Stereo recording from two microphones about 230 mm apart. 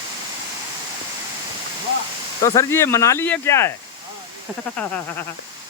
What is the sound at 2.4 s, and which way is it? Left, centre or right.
Speech, centre.